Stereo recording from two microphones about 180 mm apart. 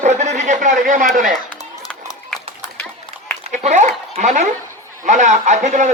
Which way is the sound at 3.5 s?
40° right (ahead or behind).